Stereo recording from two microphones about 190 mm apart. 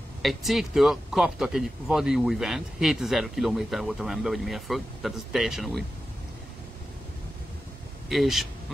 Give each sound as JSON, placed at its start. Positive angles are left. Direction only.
{"t": 0.2, "sound": "speech", "side_deg": 0}
{"t": 8.1, "sound": "speech", "side_deg": 0}